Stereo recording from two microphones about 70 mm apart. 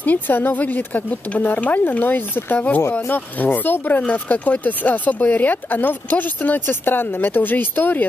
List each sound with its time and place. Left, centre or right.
0.0 s speech: left